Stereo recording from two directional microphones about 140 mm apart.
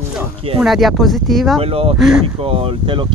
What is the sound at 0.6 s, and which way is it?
Speech, centre (ahead or behind).